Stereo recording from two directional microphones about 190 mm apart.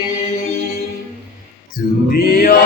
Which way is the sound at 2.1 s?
55° left (ahead or behind).